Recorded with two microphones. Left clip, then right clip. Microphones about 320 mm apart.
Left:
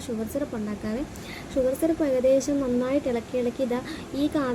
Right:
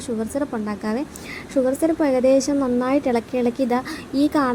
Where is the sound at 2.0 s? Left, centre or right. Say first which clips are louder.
Right 4 dB; right.